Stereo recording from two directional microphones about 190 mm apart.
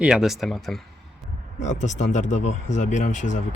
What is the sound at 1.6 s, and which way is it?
Speech, 40° left (ahead or behind).